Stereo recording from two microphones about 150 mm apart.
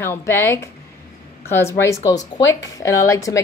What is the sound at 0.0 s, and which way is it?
A woman's voice, 15° left (ahead or behind).